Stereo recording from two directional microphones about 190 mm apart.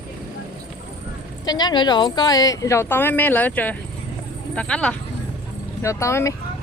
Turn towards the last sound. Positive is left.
turn(degrees=15)  # may be behind; listen again after turning